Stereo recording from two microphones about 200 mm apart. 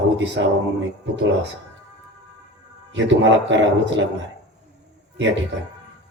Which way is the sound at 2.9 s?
65° right (ahead or behind).